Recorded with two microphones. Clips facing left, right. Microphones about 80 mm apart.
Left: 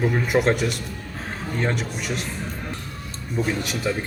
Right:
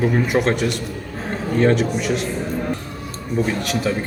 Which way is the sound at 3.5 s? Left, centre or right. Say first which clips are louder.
Right 3 dB; centre.